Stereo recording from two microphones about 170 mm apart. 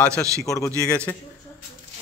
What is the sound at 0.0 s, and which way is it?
Speech, 5° left (ahead or behind).